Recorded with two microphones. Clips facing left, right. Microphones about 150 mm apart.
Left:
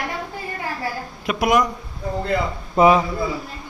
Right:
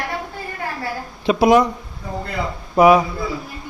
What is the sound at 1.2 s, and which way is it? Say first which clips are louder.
Speech: right 5 dB; 30° right (ahead or behind).